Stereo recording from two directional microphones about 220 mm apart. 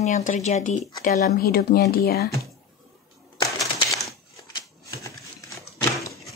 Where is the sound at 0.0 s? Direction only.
35° left (ahead or behind).